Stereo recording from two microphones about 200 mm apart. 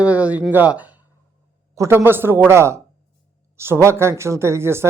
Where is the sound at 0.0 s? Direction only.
5° right (ahead or behind).